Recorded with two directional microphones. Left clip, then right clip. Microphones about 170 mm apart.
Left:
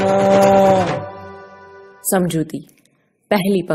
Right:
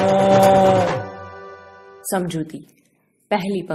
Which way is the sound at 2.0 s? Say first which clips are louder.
Left 5 dB; 40° left (ahead or behind).